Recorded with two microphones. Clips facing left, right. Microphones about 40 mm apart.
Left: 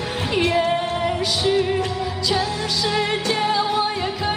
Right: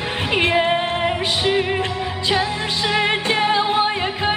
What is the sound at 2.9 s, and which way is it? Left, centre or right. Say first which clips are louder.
Music: right 4 dB; right.